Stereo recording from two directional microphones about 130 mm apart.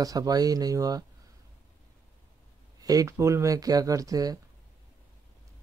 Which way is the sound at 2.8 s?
30° right (ahead or behind).